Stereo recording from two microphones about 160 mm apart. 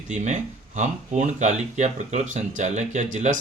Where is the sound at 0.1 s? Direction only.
50° right (ahead or behind).